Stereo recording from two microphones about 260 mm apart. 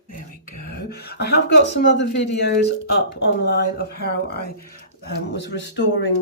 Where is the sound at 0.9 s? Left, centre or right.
Left.